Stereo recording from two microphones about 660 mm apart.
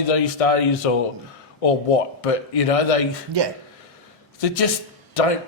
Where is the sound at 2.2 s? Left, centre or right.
Left.